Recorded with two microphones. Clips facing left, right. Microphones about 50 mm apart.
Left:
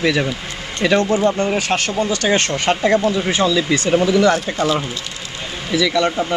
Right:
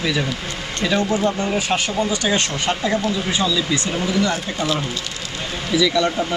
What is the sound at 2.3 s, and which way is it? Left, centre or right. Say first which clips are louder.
Speech: left 4 dB; left.